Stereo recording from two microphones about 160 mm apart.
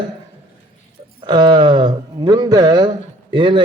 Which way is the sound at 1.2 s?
25° right (ahead or behind).